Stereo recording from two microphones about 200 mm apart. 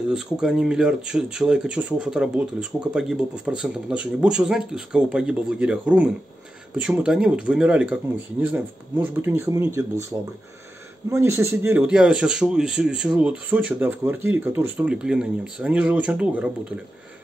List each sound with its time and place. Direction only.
0.1 s speech: 5° right (ahead or behind)
11.1 s speech: 15° right (ahead or behind)